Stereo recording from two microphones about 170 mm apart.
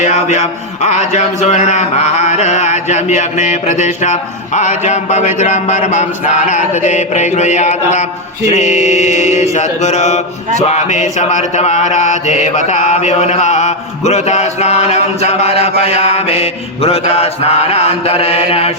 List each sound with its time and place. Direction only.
0.0 s mantra: 45° left (ahead or behind)